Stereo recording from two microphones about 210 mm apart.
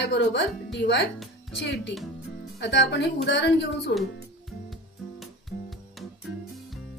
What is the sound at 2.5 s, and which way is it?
A woman's voice, 55° left (ahead or behind).